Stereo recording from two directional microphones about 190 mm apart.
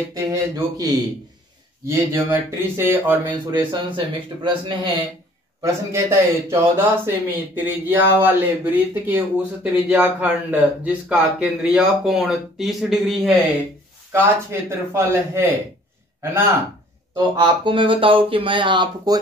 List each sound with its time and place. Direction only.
0.1 s speech: 20° right (ahead or behind)
5.6 s speech: 15° right (ahead or behind)
14.1 s speech: 10° right (ahead or behind)
17.1 s speech: 25° right (ahead or behind)